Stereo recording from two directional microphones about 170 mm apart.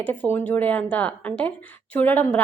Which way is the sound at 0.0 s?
10° left (ahead or behind).